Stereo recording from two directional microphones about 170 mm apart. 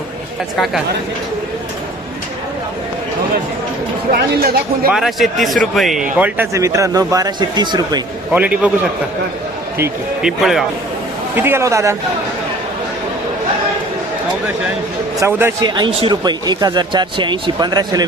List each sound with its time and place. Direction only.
4.1 s speech: 65° right (ahead or behind)
4.9 s speech: centre (ahead or behind); by 8.0 s 25° right (ahead or behind)
8.3 s a man's voice: 10° right (ahead or behind)
9.7 s a man's voice: 15° right (ahead or behind)
10.2 s speech: centre (ahead or behind)
11.3 s a man's voice: 15° right (ahead or behind)
15.2 s a man's voice: 15° right (ahead or behind)
15.6 s speech: 25° right (ahead or behind)